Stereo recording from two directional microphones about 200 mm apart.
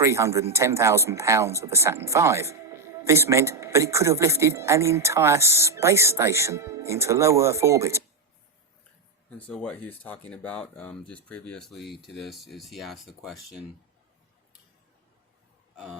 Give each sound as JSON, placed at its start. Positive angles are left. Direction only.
{"t": 0.0, "sound": "a man's voice", "side_deg": -15}
{"t": 9.5, "sound": "speech", "side_deg": 5}